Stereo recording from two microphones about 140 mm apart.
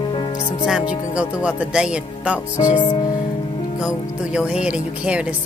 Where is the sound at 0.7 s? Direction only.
5° right (ahead or behind).